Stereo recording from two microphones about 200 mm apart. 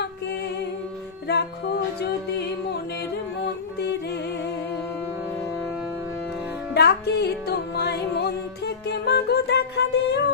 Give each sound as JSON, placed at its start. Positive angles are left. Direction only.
{"t": 3.4, "sound": "music", "side_deg": 55}
{"t": 6.7, "sound": "music", "side_deg": 55}